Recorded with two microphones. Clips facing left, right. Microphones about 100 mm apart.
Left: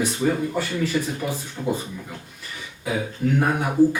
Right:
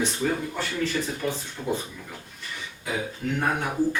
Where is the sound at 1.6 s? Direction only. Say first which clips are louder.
Left 4 dB; 5° left (ahead or behind).